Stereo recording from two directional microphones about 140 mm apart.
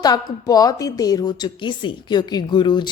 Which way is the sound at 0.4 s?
25° left (ahead or behind).